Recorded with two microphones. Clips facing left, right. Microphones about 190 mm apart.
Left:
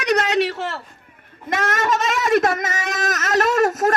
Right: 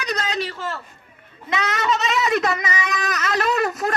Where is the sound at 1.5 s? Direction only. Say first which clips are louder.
Left 2 dB; 50° left (ahead or behind).